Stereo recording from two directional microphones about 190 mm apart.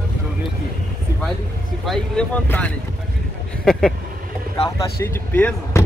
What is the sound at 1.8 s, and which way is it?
Speech, 5° left (ahead or behind).